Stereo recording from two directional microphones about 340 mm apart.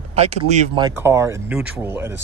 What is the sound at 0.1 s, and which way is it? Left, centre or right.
Speech, centre.